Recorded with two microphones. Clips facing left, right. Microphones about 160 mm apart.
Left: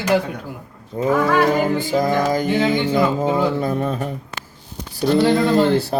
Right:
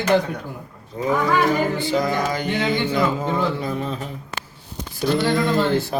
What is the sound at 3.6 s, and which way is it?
Mantra, 50° left (ahead or behind).